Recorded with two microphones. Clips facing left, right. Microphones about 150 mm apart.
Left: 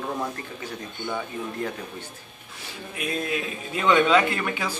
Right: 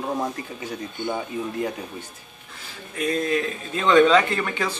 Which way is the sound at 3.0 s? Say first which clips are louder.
Right 5 dB; 5° left (ahead or behind).